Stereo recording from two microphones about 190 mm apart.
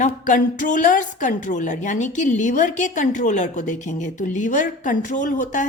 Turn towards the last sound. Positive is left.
turn(degrees=40)  # may be behind; listen again after turning